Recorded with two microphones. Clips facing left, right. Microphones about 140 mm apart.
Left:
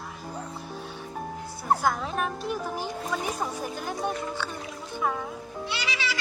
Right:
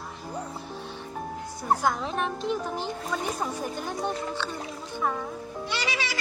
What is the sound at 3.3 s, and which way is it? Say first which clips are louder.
Speech: right 1 dB; 10° left (ahead or behind).